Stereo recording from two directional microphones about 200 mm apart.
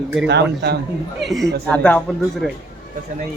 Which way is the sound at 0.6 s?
55° right (ahead or behind).